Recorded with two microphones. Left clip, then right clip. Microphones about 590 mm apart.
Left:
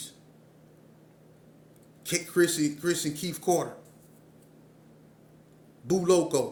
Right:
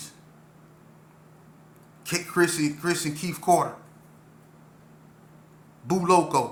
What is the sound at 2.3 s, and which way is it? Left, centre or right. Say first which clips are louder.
A man's voice: right 2 dB; left.